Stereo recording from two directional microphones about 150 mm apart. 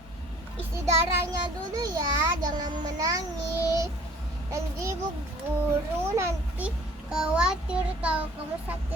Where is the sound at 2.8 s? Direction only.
25° right (ahead or behind).